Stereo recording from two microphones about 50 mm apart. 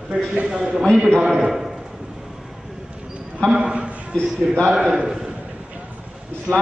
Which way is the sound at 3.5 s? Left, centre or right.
Centre.